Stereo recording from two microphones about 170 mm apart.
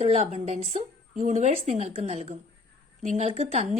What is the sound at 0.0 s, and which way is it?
A woman's voice, 40° right (ahead or behind).